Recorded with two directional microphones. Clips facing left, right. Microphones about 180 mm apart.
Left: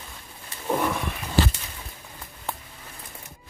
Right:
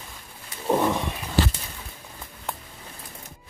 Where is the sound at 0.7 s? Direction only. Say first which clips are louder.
Right 3 dB; 20° right (ahead or behind).